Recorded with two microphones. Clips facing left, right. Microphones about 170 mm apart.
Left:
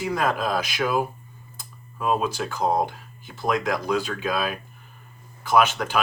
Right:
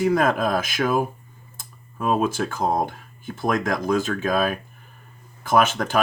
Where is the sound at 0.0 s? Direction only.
50° right (ahead or behind).